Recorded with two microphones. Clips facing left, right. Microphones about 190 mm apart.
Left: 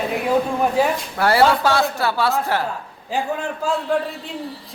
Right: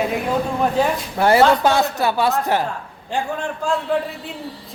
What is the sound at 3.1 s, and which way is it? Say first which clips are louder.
Speech: even; 5° left (ahead or behind).